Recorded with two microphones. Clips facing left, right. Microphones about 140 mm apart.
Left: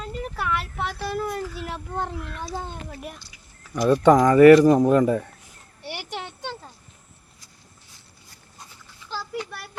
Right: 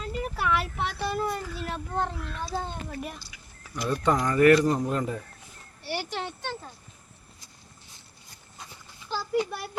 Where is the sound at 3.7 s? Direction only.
90° left.